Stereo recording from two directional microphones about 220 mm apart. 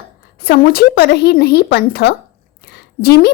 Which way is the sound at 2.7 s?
45° left (ahead or behind).